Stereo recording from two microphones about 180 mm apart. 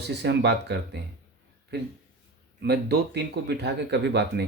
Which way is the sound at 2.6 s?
70° right (ahead or behind).